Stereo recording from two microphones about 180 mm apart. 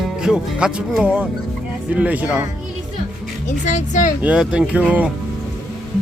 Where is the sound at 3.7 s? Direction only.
45° left (ahead or behind).